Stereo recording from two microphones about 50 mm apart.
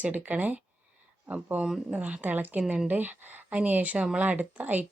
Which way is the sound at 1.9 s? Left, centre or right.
Right.